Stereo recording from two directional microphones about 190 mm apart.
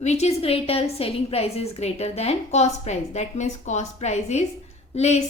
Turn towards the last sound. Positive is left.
turn(degrees=35)  # may be behind; listen again after turning